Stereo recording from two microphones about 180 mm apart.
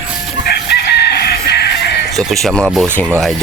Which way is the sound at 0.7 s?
65° left (ahead or behind).